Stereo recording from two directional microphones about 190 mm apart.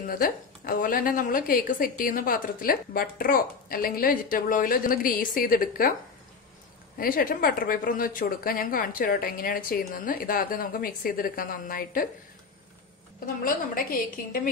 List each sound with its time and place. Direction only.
0.1 s a woman's voice: 50° left (ahead or behind)
7.0 s a woman's voice: 50° left (ahead or behind)
13.4 s a woman's voice: 45° left (ahead or behind)